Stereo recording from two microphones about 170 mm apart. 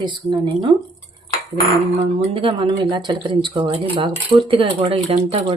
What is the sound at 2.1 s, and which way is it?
Speech, 30° right (ahead or behind).